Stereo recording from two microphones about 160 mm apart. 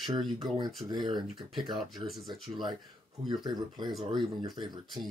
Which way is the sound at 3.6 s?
30° right (ahead or behind).